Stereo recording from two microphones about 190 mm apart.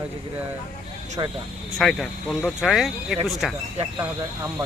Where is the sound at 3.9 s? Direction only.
20° right (ahead or behind).